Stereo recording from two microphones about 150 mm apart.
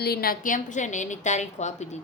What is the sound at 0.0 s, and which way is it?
A woman's voice, 85° left.